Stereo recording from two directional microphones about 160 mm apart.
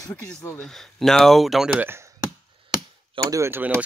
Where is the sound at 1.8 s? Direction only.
15° right (ahead or behind).